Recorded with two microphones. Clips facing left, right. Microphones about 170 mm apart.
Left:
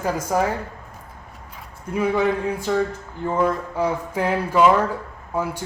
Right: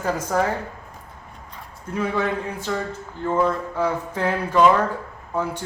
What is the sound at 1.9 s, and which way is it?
Speech, 10° left (ahead or behind).